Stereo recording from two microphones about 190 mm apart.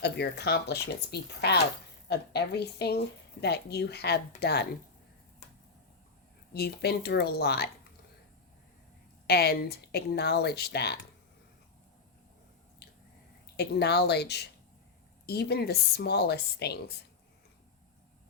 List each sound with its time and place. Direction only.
0.0 s speech: 60° left (ahead or behind)
6.5 s speech: 55° left (ahead or behind)
9.2 s speech: 55° left (ahead or behind)
13.6 s speech: 60° left (ahead or behind)